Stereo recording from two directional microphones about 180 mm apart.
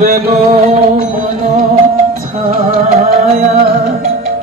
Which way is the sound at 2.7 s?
35° right (ahead or behind).